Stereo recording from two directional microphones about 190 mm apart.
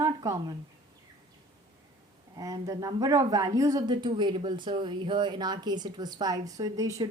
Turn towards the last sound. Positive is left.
turn(degrees=-20)  # may be behind; listen again after turning